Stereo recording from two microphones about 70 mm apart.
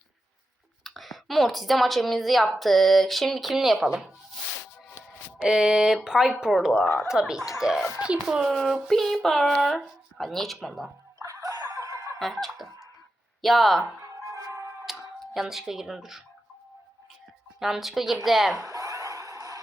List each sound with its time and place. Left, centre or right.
0.9 s a woman's voice: centre
5.4 s a woman's voice: centre
11.2 s a sound: right
12.2 s fowl: centre
13.4 s a woman's voice: centre
14.3 s music: right
14.8 s speech: centre
17.6 s a woman's voice: centre
18.5 s a sound: right